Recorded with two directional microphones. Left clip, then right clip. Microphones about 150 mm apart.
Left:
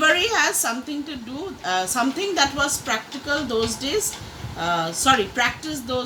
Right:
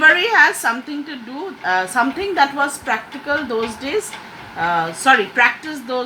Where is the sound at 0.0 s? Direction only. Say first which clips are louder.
Right 7 dB; 40° left (ahead or behind).